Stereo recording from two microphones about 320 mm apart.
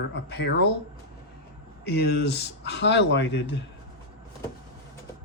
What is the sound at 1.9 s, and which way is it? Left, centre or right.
Speech, left.